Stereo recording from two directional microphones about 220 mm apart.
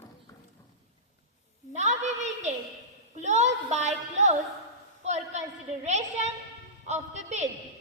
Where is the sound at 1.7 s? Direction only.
30° right (ahead or behind).